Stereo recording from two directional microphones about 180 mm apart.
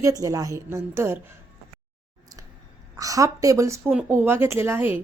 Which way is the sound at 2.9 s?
20° right (ahead or behind).